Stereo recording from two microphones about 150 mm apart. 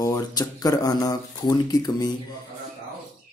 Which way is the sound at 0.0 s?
25° left (ahead or behind).